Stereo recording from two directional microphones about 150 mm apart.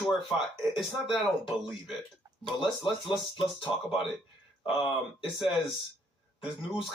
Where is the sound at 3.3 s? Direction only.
35° left (ahead or behind).